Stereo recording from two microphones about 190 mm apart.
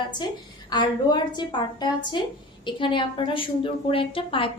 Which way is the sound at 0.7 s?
25° left (ahead or behind).